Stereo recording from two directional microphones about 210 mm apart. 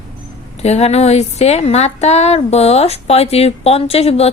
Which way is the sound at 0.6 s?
30° left (ahead or behind).